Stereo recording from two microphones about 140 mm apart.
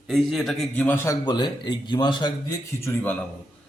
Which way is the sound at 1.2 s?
35° left (ahead or behind).